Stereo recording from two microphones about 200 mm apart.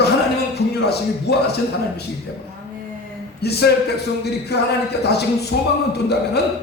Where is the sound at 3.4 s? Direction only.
55° left (ahead or behind).